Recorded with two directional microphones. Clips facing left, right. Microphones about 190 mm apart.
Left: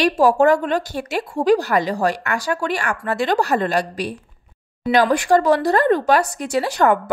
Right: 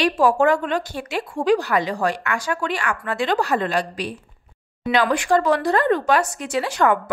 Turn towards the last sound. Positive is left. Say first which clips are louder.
# left 2 dB
turn(degrees=40)  # may be behind; listen again after turning